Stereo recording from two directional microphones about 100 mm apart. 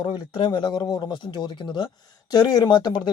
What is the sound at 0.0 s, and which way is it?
Speech, 50° left (ahead or behind).